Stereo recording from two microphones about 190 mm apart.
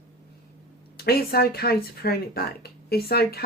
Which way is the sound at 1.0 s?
55° left (ahead or behind).